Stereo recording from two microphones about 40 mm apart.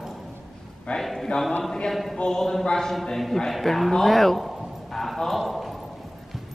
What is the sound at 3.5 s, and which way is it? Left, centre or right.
Speech, centre.